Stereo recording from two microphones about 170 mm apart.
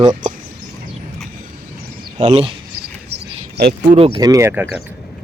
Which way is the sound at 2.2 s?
40° right (ahead or behind).